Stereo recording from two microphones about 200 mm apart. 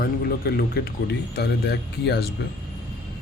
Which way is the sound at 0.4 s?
50° left (ahead or behind).